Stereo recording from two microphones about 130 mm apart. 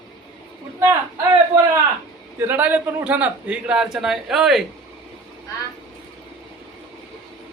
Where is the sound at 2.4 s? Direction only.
15° right (ahead or behind).